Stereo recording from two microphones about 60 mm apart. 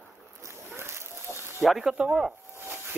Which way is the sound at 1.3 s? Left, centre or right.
Right.